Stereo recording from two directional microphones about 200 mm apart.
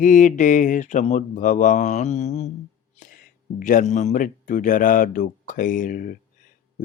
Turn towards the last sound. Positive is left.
turn(degrees=40)  # may be behind; listen again after turning